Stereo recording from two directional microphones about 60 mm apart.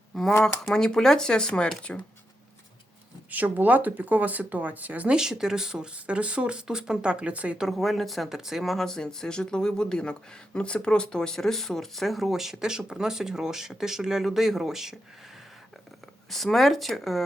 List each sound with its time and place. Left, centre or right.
0.1 s a sound: centre
0.6 s speech: centre
3.3 s speech: right
5.1 s speech: centre
7.6 s speech: centre
16.3 s speech: centre